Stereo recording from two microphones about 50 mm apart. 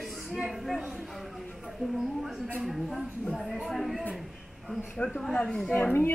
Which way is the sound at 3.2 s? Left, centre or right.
Centre.